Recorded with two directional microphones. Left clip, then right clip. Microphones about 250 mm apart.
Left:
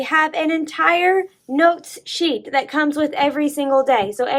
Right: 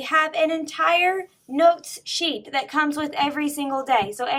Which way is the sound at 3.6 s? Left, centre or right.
Centre.